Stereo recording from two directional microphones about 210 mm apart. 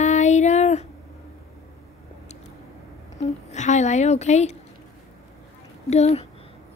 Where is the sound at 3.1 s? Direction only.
35° left (ahead or behind).